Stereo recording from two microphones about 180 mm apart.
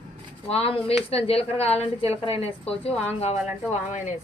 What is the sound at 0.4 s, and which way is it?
A woman's voice, 35° left (ahead or behind).